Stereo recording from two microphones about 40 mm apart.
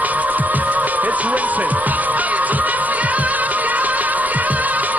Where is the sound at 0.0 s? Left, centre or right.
Right.